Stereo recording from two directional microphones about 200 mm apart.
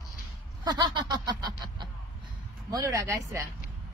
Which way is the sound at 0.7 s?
20° right (ahead or behind).